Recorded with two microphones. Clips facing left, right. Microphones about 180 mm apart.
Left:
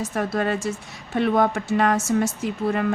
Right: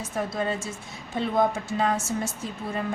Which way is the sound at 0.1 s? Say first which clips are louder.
Left 2 dB; 70° left (ahead or behind).